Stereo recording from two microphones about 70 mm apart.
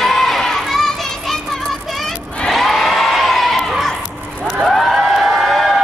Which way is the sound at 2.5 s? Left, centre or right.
Centre.